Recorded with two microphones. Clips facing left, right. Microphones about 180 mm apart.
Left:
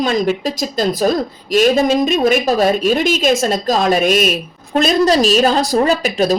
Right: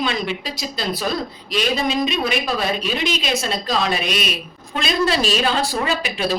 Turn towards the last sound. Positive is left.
turn(degrees=40)  # may be behind; listen again after turning